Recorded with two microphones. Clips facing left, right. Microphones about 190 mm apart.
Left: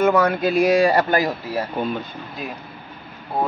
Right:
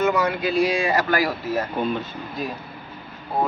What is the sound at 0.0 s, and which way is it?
Speech, 50° left (ahead or behind).